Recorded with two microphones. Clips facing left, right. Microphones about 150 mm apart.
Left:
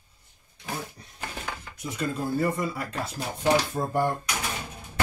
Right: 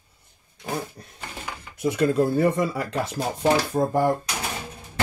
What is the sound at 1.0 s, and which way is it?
Speech, 50° right (ahead or behind).